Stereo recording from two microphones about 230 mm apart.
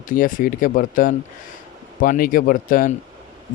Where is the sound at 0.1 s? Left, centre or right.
Left.